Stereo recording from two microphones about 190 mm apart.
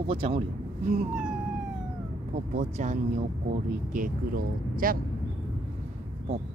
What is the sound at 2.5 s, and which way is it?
A woman's voice, 40° right (ahead or behind).